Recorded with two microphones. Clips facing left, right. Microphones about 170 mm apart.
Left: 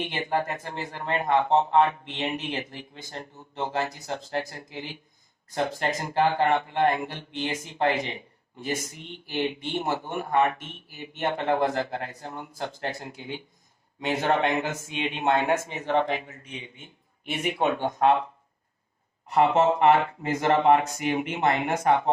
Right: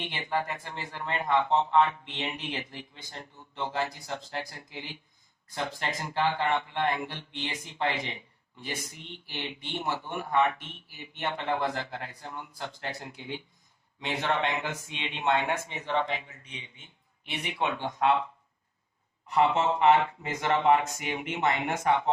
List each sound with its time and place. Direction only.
0.0 s speech: 45° left (ahead or behind)
19.3 s speech: 45° left (ahead or behind)